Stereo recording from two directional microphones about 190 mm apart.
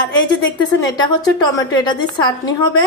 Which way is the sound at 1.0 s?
20° left (ahead or behind).